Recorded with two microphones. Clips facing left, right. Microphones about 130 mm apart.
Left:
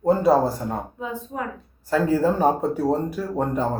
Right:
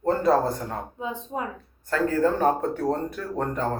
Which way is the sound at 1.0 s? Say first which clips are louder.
Left 1 dB; 20° right (ahead or behind).